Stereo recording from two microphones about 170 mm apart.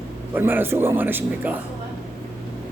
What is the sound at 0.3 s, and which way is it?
A man's voice, 10° right (ahead or behind).